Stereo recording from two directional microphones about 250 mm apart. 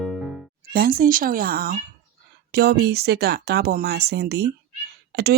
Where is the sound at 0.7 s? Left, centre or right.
Right.